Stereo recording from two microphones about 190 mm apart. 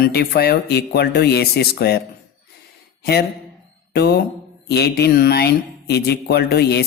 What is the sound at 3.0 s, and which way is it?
Speech, 55° left (ahead or behind).